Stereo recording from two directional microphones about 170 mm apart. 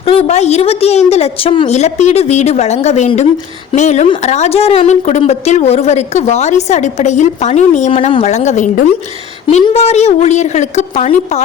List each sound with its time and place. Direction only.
0.0 s speech: 35° left (ahead or behind)